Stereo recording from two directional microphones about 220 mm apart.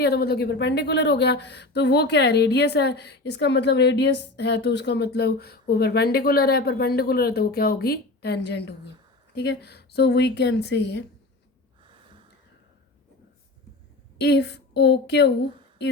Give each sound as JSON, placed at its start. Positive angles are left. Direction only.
{"t": 0.0, "sound": "speech", "side_deg": 45}
{"t": 14.2, "sound": "speech", "side_deg": 50}